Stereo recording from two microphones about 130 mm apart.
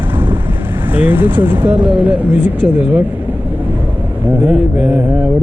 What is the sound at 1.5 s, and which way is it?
Speech, 40° right (ahead or behind).